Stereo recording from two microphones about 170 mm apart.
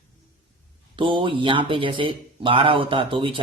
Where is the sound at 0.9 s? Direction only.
30° right (ahead or behind).